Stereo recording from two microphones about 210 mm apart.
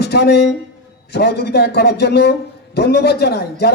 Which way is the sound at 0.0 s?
55° left (ahead or behind).